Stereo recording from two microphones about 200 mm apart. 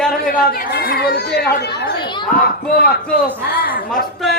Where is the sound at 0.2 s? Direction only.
45° left (ahead or behind).